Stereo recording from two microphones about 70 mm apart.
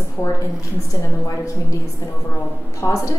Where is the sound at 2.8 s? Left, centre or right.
Left.